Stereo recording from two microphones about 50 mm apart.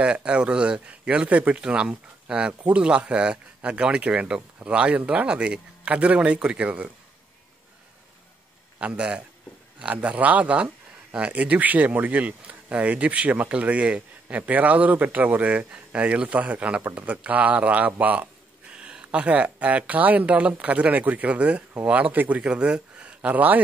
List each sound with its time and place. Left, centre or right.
0.0 s speech: right
8.7 s speech: right
18.7 s a sound: right
19.1 s speech: right
22.4 s speech: centre; by 23.6 s right